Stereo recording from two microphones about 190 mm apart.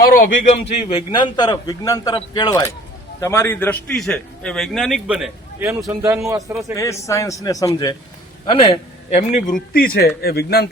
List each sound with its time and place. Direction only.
0.2 s a man's voice: 45° left (ahead or behind)
0.9 s a man's voice: 30° left (ahead or behind); by 6.6 s 15° right (ahead or behind)
6.7 s a man's voice: 15° left (ahead or behind); by 10.7 s 55° left (ahead or behind)